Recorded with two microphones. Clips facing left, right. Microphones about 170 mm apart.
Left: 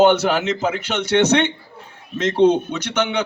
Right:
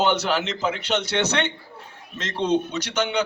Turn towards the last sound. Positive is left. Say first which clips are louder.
# left 2 dB
turn(degrees=55)  # may be behind; listen again after turning